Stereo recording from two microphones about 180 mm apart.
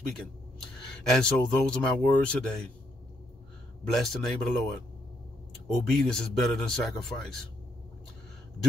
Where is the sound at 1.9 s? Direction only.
5° left (ahead or behind).